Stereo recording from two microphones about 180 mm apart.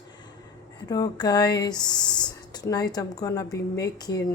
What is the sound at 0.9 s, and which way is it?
Speech, 20° left (ahead or behind).